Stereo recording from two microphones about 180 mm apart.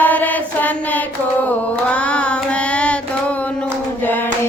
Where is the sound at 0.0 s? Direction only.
10° left (ahead or behind).